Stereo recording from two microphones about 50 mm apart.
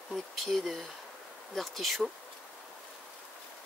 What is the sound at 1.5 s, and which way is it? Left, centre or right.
Speech, centre.